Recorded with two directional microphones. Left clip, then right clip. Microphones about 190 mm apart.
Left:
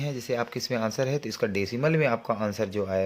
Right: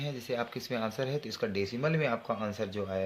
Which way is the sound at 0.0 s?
45° left (ahead or behind).